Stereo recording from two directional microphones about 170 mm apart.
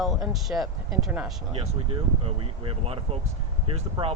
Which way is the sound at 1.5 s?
35° right (ahead or behind).